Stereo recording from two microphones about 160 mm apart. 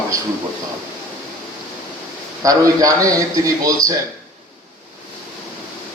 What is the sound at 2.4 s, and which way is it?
A man's voice, 20° right (ahead or behind).